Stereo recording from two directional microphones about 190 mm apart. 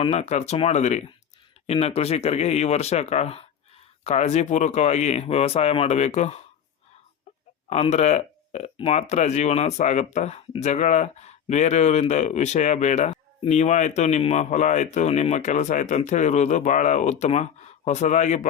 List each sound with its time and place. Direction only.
0.0 s speech: 35° left (ahead or behind)
7.7 s speech: 35° left (ahead or behind)